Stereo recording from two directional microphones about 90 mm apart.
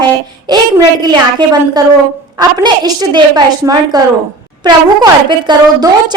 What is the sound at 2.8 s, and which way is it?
A woman's voice, 55° right (ahead or behind).